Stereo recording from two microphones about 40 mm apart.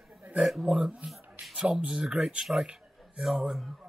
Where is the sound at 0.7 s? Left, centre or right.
Centre.